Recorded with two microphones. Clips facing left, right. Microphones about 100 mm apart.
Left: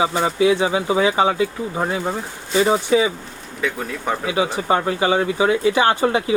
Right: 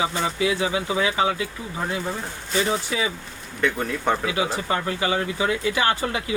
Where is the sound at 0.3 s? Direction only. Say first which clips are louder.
Left 6 dB; 25° left (ahead or behind).